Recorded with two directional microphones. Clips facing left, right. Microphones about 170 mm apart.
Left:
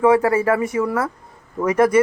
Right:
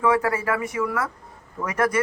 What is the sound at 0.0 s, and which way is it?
Speech, 25° left (ahead or behind).